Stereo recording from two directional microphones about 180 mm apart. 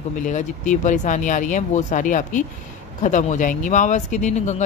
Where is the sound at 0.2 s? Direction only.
45° left (ahead or behind).